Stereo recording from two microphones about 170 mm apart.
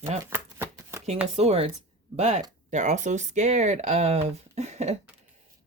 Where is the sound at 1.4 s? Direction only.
35° right (ahead or behind).